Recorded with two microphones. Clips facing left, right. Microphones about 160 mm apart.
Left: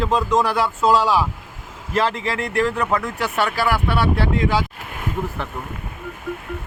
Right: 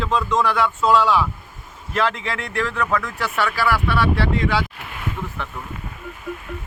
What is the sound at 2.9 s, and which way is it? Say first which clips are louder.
Speech: left 1 dB; 25° left (ahead or behind).